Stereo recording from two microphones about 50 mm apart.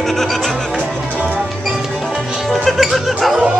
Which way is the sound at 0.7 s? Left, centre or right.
Right.